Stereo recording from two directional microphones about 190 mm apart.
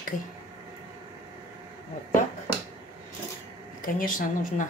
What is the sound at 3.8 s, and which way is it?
Speech, 45° left (ahead or behind).